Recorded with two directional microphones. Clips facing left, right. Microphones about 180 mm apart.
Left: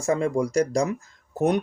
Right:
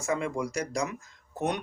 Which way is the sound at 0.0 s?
35° left (ahead or behind).